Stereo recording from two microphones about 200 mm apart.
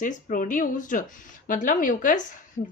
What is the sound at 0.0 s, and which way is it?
A woman's voice, 40° left (ahead or behind).